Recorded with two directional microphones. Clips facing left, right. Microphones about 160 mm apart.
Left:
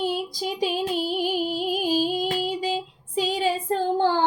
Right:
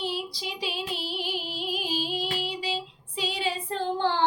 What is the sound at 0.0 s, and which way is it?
Female singing, 45° left (ahead or behind).